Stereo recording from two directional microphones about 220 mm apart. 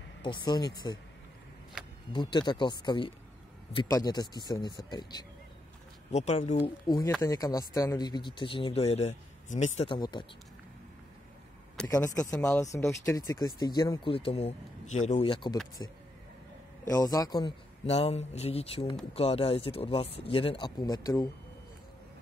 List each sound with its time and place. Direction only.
0.2 s speech: 20° left (ahead or behind)
2.1 s speech: 20° left (ahead or behind)
6.1 s speech: 30° left (ahead or behind)
7.2 s speech: 15° left (ahead or behind)
11.7 s a sound: 5° left (ahead or behind)
12.0 s speech: 15° left (ahead or behind)